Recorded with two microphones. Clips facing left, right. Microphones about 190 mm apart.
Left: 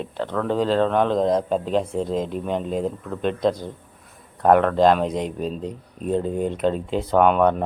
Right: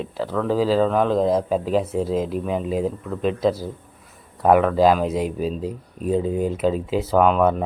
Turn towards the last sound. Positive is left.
turn(degrees=0)  # may be behind; listen again after turning